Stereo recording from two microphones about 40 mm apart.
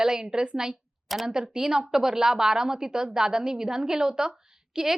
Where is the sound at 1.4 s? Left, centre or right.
Centre.